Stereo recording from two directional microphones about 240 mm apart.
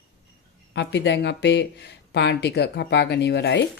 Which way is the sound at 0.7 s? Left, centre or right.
Left.